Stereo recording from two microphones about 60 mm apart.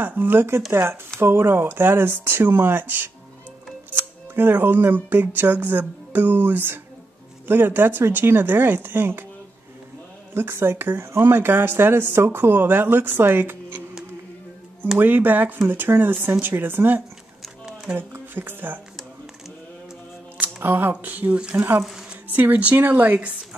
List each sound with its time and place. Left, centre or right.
0.0 s speech: right
10.3 s speech: right
15.0 s speech: right
20.3 s a sound: right
20.9 s speech: right